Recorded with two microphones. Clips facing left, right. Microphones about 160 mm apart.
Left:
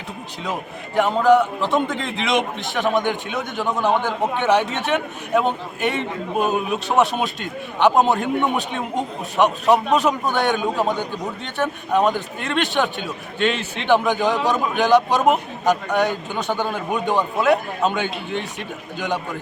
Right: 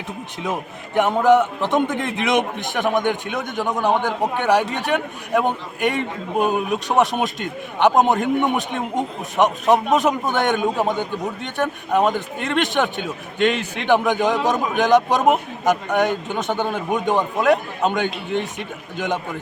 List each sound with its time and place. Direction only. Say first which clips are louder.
0.9 s a man's voice: even; 20° right (ahead or behind)